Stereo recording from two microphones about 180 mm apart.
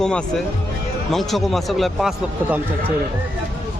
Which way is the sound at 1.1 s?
Centre (ahead or behind).